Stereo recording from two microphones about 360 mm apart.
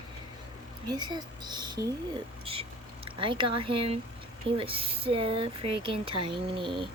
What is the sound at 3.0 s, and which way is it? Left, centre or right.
Speech, centre.